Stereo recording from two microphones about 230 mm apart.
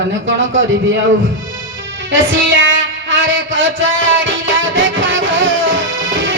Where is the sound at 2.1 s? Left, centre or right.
Right.